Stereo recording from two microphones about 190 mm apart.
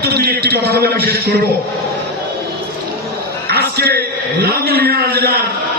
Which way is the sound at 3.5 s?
55° right (ahead or behind).